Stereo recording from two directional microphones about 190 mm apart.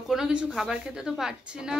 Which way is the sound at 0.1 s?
5° right (ahead or behind).